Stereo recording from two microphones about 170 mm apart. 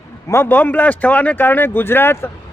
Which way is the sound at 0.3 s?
15° left (ahead or behind).